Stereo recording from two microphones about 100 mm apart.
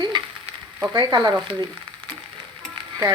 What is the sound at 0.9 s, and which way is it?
Frying, 45° right (ahead or behind).